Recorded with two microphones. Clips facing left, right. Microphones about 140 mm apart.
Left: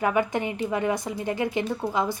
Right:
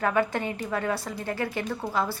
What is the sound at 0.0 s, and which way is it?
A woman's voice, 15° left (ahead or behind).